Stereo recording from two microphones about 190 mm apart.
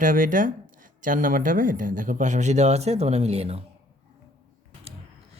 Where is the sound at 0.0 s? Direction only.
45° right (ahead or behind).